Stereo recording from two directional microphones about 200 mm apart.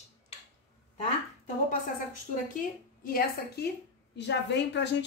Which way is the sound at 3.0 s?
45° left (ahead or behind).